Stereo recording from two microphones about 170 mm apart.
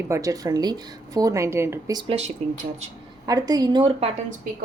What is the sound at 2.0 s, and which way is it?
Speech, 35° right (ahead or behind).